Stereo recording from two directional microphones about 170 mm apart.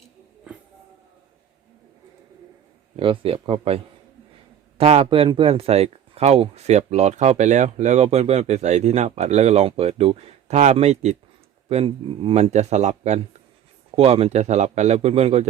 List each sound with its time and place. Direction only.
2.9 s speech: 30° right (ahead or behind)
4.8 s speech: 35° right (ahead or behind)